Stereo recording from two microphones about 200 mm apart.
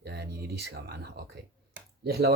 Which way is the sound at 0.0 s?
55° right (ahead or behind).